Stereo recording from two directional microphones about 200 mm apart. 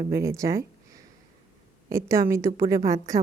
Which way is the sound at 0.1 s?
15° right (ahead or behind).